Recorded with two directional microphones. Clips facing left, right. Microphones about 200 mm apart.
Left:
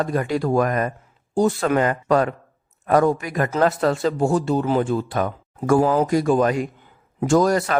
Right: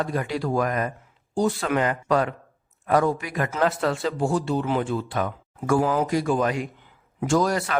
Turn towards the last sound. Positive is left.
turn(degrees=45)  # may be behind; listen again after turning